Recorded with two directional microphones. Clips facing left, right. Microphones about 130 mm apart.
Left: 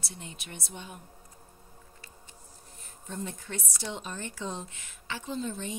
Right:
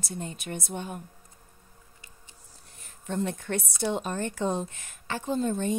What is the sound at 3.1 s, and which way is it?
A woman's voice, 65° right (ahead or behind).